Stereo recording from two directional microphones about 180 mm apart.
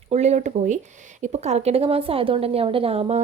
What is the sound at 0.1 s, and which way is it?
Speech, 35° right (ahead or behind).